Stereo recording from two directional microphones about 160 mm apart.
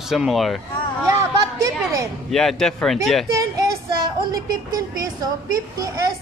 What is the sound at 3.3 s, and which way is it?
A woman's voice, 20° right (ahead or behind).